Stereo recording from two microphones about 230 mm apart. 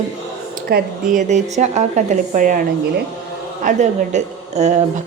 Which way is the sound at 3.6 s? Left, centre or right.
Right.